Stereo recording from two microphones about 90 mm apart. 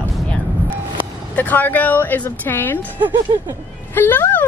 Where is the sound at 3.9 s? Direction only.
25° left (ahead or behind).